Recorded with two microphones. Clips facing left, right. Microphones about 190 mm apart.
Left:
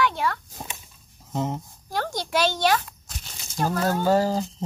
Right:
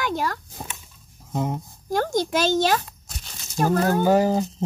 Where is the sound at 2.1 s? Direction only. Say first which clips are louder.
Right 3 dB; 45° right (ahead or behind).